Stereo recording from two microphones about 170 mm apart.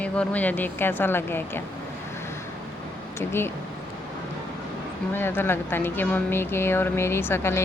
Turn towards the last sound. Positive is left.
turn(degrees=15)  # may be behind; listen again after turning